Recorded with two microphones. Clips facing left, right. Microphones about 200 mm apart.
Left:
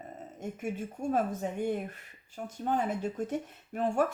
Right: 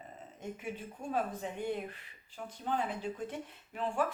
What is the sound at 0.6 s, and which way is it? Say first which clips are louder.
Speech: left 7 dB; 45° left (ahead or behind).